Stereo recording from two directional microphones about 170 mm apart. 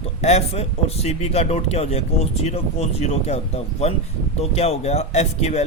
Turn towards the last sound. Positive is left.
turn(degrees=40)  # may be behind; listen again after turning